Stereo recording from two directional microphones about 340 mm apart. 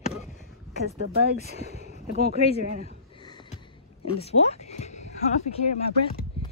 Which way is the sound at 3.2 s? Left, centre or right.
Centre.